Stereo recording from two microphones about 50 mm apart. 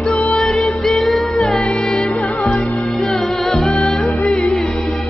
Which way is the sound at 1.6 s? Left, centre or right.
Left.